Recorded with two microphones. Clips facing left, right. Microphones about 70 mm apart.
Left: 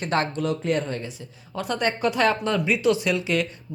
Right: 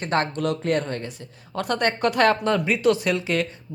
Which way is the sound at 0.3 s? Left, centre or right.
Right.